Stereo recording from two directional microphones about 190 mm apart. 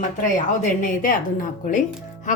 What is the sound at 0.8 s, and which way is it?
Speech, 45° left (ahead or behind).